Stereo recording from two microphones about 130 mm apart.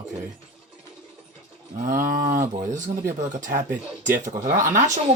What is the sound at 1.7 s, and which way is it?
Wild animals, 90° right.